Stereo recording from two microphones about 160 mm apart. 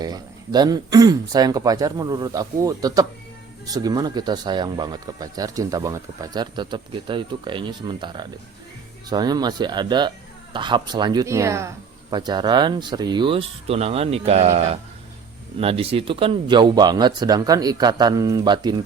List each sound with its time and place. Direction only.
0.0 s speech: 25° right (ahead or behind)